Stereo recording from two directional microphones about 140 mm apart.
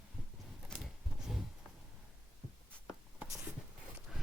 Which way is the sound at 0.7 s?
5° right (ahead or behind).